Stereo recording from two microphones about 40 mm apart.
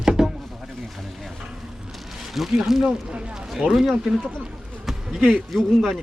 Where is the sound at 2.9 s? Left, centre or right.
Right.